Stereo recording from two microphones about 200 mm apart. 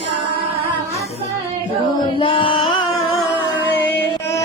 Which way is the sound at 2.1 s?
25° left (ahead or behind).